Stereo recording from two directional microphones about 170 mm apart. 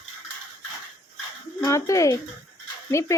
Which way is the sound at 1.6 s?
20° left (ahead or behind).